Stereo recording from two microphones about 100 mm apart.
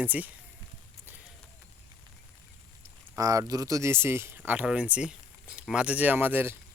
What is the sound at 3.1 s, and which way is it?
Speech, 35° right (ahead or behind).